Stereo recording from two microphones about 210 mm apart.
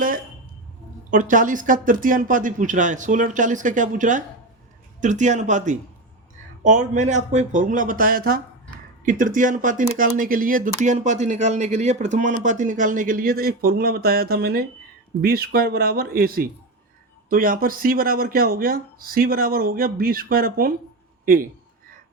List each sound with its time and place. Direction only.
1.1 s speech: 40° right (ahead or behind)